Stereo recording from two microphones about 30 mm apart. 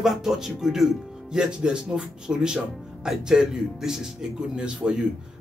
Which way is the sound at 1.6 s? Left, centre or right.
Right.